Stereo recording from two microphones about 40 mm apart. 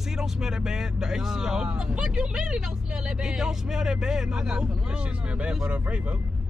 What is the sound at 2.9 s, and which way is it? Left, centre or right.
Speech, centre.